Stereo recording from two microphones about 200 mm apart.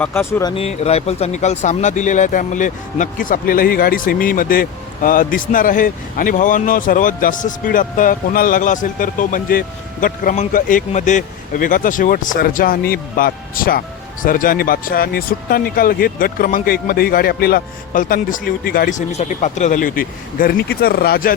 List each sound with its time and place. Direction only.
0.0 s speech: 10° left (ahead or behind)
0.5 s speech: 30° left (ahead or behind); by 21.3 s 50° left (ahead or behind)